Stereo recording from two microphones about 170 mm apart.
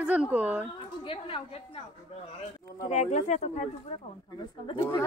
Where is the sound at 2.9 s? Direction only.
45° left (ahead or behind).